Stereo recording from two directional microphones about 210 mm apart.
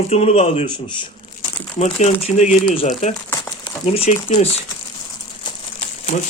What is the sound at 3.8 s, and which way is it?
Speech, 30° left (ahead or behind).